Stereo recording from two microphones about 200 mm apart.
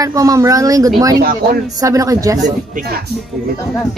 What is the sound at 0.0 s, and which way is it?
Speech, 15° right (ahead or behind).